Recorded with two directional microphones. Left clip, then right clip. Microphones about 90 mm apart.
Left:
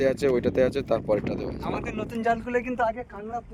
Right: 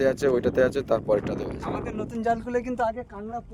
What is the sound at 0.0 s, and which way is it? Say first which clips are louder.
Speech: right 1 dB; 15° right (ahead or behind).